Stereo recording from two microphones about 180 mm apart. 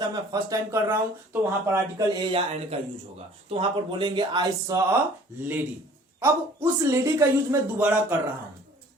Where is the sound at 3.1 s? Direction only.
30° right (ahead or behind).